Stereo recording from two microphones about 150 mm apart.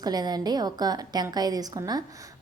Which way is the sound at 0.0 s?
25° right (ahead or behind).